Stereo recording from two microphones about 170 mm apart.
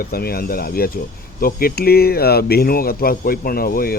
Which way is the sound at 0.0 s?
65° left (ahead or behind).